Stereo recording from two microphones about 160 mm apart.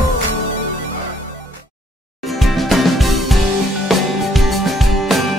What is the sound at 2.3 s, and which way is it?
Music, centre (ahead or behind).